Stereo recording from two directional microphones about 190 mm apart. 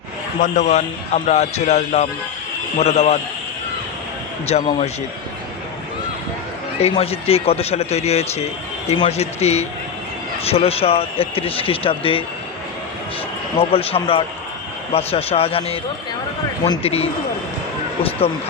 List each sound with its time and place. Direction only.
0.4 s speech: 40° left (ahead or behind)
4.4 s speech: 35° left (ahead or behind)
6.8 s speech: 30° left (ahead or behind)
13.6 s speech: 30° left (ahead or behind)